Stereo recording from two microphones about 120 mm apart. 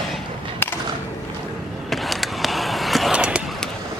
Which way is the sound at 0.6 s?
15° left (ahead or behind).